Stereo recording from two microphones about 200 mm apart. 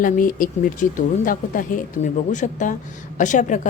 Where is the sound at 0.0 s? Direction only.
45° left (ahead or behind).